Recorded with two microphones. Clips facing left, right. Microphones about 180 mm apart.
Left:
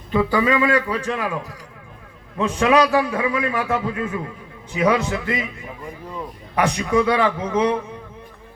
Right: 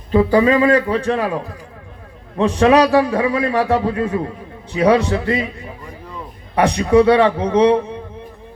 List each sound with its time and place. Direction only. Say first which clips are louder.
0.1 s a man's voice: right 6 dB; 35° right (ahead or behind)
6.6 s a man's voice: right 6 dB; 35° right (ahead or behind)